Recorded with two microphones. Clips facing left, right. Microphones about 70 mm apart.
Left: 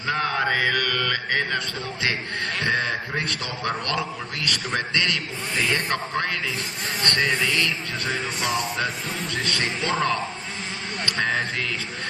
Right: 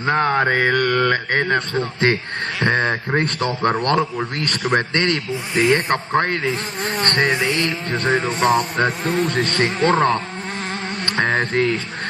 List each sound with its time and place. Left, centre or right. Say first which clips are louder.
0.0 s a man's voice: right 6 dB; right
7.0 s music: right 4 dB; right
11.0 s speech: right 5 dB; right